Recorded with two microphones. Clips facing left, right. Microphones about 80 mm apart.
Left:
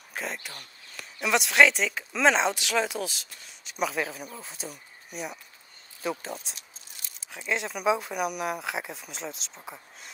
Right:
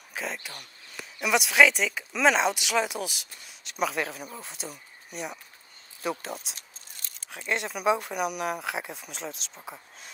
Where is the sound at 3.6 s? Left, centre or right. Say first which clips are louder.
Even; centre.